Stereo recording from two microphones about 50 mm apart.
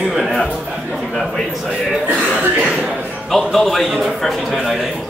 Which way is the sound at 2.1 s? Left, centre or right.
Right.